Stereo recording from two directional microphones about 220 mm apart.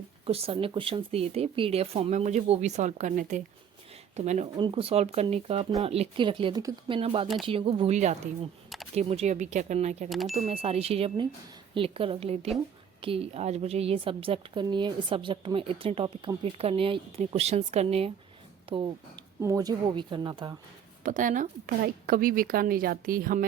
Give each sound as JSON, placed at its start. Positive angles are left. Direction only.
{"t": 0.3, "sound": "a woman's voice", "side_deg": -25}
{"t": 4.5, "sound": "a woman's voice", "side_deg": -20}
{"t": 10.1, "sound": "speech", "side_deg": 0}
{"t": 10.5, "sound": "a woman's voice", "side_deg": -25}
{"t": 21.0, "sound": "a woman's voice", "side_deg": -35}